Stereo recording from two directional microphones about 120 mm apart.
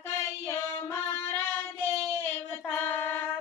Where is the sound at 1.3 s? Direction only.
20° left (ahead or behind).